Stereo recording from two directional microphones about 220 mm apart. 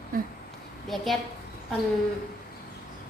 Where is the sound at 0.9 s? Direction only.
Centre (ahead or behind).